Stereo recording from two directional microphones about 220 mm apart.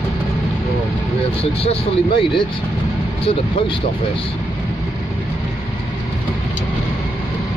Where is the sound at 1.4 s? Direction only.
25° left (ahead or behind).